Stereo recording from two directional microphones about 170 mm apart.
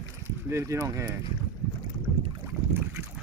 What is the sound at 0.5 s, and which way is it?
Speech, 15° right (ahead or behind).